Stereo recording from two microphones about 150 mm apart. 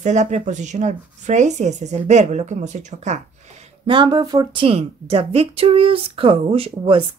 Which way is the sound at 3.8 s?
30° right (ahead or behind).